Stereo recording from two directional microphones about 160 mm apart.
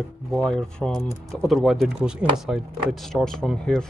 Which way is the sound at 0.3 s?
5° left (ahead or behind).